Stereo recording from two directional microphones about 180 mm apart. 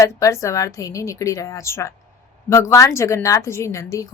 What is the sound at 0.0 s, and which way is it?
A woman's voice, 15° left (ahead or behind).